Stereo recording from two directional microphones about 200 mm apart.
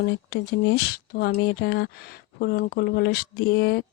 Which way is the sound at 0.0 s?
60° left (ahead or behind).